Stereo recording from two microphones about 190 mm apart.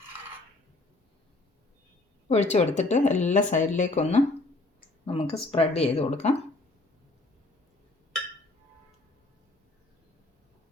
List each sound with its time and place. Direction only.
2.3 s speech: 35° left (ahead or behind)